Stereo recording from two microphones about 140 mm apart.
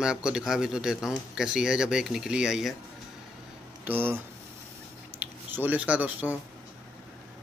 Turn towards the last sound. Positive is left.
turn(degrees=-10)  # may be behind; listen again after turning